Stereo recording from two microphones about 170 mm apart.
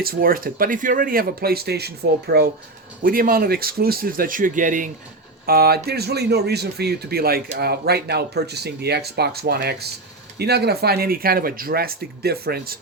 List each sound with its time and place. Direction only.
0.0 s speech: 60° right (ahead or behind)
3.0 s speech: 55° right (ahead or behind)
5.5 s speech: 65° right (ahead or behind)